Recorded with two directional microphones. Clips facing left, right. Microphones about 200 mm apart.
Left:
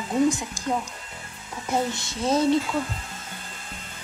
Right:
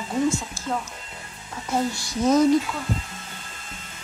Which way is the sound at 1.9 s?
25° left (ahead or behind).